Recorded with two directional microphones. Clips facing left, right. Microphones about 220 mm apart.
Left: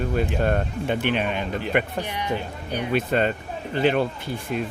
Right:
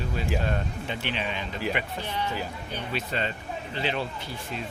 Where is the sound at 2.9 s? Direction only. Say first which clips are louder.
Left 10 dB; 50° left (ahead or behind).